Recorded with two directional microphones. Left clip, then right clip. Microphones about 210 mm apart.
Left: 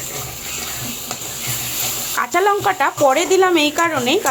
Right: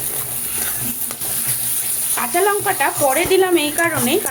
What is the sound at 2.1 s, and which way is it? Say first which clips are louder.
Speech: left 1 dB; 15° left (ahead or behind).